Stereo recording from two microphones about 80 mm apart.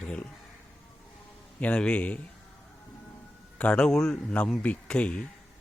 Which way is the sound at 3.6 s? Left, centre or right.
Centre.